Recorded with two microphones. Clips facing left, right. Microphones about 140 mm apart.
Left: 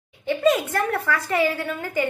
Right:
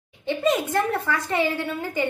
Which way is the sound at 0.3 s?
20° right (ahead or behind).